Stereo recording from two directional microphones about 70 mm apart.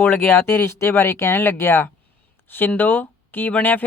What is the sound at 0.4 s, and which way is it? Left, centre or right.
Speech, left.